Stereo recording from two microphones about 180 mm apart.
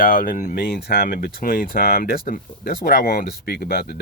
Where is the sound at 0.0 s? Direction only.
50° left (ahead or behind).